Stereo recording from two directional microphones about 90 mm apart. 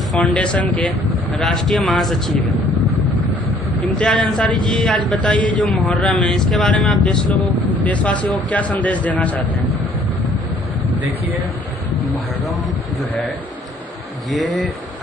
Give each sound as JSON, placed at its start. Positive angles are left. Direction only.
{"t": 0.2, "sound": "a man's voice", "side_deg": 10}
{"t": 1.0, "sound": "speech", "side_deg": 0}
{"t": 2.0, "sound": "vehicle", "side_deg": 5}
{"t": 4.0, "sound": "a man's voice", "side_deg": 10}
{"t": 5.7, "sound": "speech", "side_deg": 0}
{"t": 7.8, "sound": "a man's voice", "side_deg": 15}